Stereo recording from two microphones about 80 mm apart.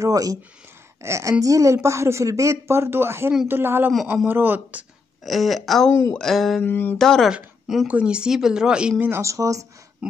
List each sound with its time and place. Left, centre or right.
0.0 s speech: right
1.0 s speech: right
5.2 s speech: centre
6.6 s a sound: left
7.0 s speech: centre
7.2 s a woman's voice: centre
9.2 s speech: right